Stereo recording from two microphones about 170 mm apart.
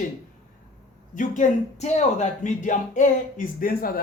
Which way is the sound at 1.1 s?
50° left (ahead or behind).